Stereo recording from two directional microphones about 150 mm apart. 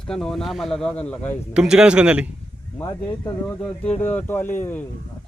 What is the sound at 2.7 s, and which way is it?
Speech, 20° left (ahead or behind).